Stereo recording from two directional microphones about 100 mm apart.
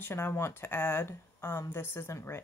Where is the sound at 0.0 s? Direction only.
25° left (ahead or behind).